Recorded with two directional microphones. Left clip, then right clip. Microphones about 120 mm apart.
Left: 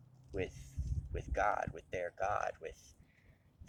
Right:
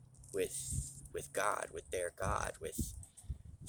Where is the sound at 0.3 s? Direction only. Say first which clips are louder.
Right 3 dB; 40° right (ahead or behind).